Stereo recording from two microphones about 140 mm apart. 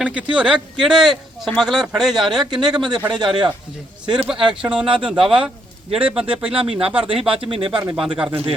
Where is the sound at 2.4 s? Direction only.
30° right (ahead or behind).